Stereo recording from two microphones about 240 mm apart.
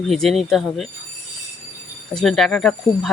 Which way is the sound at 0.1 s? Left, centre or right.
Centre.